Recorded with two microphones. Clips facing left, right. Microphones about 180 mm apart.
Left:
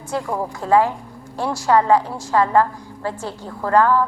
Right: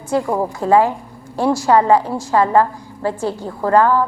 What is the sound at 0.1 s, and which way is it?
A woman's voice, 10° right (ahead or behind).